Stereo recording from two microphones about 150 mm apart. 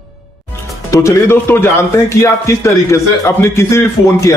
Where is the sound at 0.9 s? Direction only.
15° left (ahead or behind).